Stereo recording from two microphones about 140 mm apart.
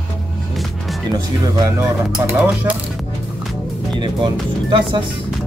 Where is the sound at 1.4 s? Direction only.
25° right (ahead or behind).